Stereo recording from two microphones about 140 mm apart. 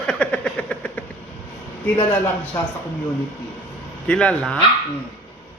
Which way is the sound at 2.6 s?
20° left (ahead or behind).